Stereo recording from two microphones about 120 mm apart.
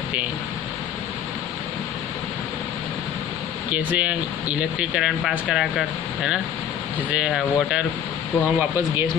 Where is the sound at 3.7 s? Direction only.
15° right (ahead or behind).